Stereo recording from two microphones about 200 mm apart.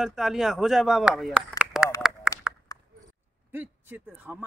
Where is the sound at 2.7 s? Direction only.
15° left (ahead or behind).